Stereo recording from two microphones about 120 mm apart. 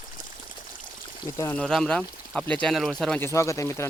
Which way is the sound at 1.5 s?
5° left (ahead or behind).